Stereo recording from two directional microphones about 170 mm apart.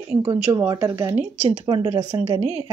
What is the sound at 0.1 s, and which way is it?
A woman's voice, 15° right (ahead or behind).